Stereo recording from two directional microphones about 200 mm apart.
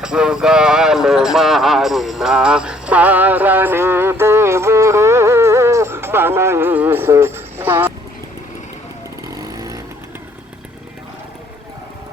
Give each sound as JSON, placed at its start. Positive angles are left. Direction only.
{"t": 0.0, "sound": "clip-clop", "side_deg": -5}
{"t": 9.4, "sound": "vehicle", "side_deg": -15}